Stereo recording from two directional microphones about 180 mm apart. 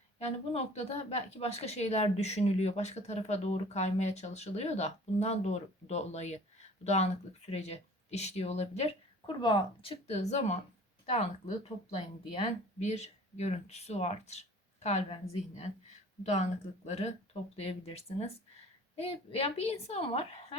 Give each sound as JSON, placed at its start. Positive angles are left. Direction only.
{"t": 0.2, "sound": "a woman's voice", "side_deg": 35}